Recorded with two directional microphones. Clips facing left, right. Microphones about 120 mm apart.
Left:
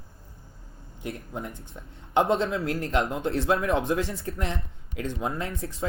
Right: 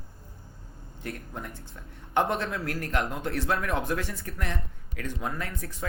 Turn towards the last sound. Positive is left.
turn(degrees=25)  # may be behind; listen again after turning